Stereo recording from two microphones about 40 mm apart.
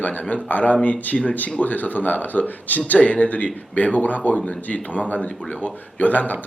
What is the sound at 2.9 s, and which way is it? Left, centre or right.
Speech, left.